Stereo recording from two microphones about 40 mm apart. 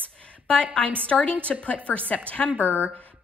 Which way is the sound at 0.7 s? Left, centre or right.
Left.